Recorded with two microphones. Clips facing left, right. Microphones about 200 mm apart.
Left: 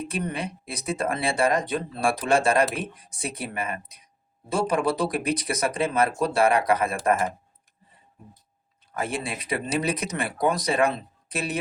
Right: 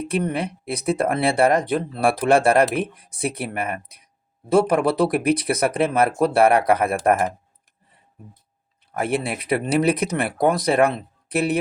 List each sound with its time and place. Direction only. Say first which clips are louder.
0.1 s speech: right 6 dB; 60° right (ahead or behind)
8.9 s speech: right 6 dB; 65° right (ahead or behind)